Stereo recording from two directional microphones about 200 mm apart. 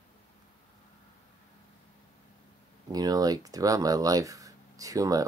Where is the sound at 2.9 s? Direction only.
20° right (ahead or behind).